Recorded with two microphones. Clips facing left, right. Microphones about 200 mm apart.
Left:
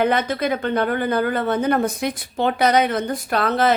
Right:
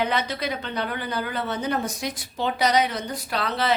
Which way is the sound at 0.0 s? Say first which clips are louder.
Left 6 dB; 50° left (ahead or behind).